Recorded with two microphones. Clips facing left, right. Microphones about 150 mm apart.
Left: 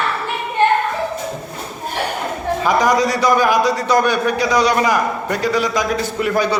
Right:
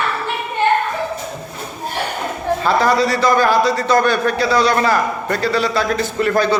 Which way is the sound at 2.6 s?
15° left (ahead or behind).